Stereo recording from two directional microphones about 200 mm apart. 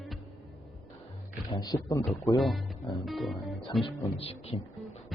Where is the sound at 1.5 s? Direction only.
20° left (ahead or behind).